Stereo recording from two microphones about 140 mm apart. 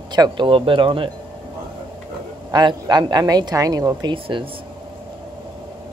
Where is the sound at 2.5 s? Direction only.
30° right (ahead or behind).